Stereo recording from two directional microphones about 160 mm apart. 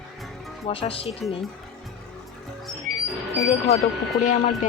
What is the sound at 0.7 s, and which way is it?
Speech, 35° left (ahead or behind).